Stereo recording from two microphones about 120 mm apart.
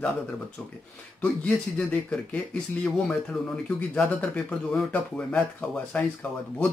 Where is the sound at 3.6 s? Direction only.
10° left (ahead or behind).